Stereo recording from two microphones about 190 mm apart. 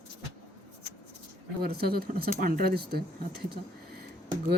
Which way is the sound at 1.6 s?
55° right (ahead or behind).